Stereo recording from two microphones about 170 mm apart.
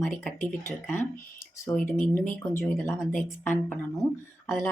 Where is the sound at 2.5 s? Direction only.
15° left (ahead or behind).